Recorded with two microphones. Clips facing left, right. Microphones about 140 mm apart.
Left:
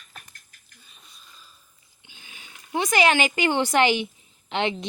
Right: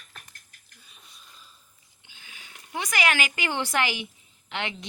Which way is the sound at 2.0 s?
20° left (ahead or behind).